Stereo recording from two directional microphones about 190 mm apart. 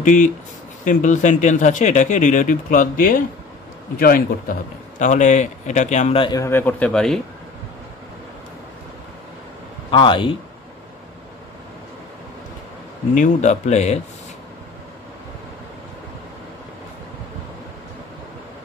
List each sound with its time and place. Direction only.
0.0 s a man's voice: 40° left (ahead or behind); by 7.2 s 5° left (ahead or behind)
9.8 s speech: 25° left (ahead or behind)
13.1 s a man's voice: 40° left (ahead or behind)